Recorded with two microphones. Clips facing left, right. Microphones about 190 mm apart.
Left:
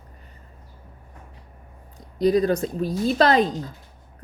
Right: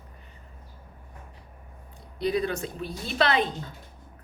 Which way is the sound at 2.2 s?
40° left (ahead or behind).